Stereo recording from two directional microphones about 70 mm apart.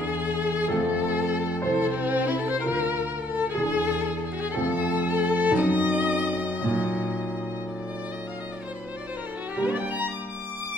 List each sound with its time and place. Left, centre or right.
0.1 s music: right
9.6 s violin: right